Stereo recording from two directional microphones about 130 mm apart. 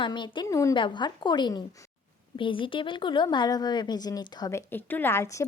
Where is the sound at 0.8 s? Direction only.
35° left (ahead or behind).